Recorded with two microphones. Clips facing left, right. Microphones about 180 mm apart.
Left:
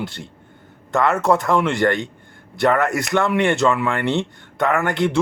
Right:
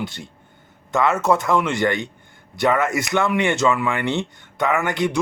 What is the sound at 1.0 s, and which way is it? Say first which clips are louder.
Speech: left 1 dB; 20° right (ahead or behind).